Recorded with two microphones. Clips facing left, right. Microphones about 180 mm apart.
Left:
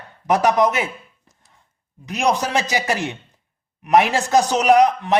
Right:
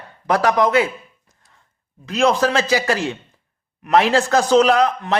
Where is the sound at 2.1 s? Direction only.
15° left (ahead or behind).